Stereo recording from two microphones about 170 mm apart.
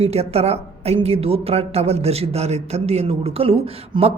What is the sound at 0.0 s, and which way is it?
A woman's voice, 35° right (ahead or behind).